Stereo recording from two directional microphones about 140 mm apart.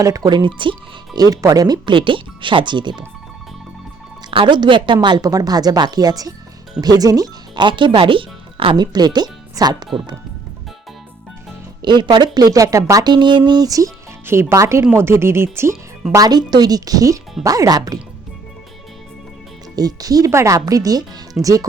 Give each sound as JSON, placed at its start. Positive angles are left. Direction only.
{"t": 0.0, "sound": "speech", "side_deg": -25}
{"t": 4.3, "sound": "speech", "side_deg": -35}
{"t": 11.8, "sound": "speech", "side_deg": -30}
{"t": 16.1, "sound": "speech", "side_deg": -30}
{"t": 19.7, "sound": "speech", "side_deg": -25}